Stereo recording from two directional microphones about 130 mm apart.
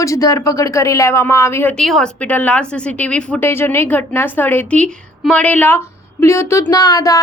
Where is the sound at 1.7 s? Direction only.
5° left (ahead or behind).